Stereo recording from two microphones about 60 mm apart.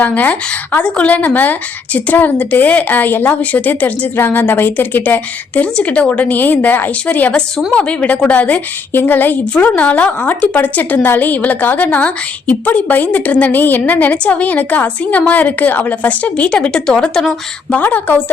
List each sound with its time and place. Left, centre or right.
0.0 s a woman's voice: left
17.7 s a woman's voice: left